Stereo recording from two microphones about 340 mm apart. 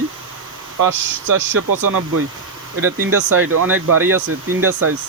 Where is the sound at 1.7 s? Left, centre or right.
Right.